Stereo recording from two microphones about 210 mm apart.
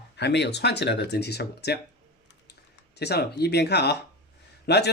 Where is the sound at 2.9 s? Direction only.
50° left (ahead or behind).